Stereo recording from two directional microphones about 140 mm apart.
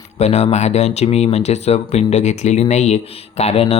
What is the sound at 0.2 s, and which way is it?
Speech, 50° left (ahead or behind).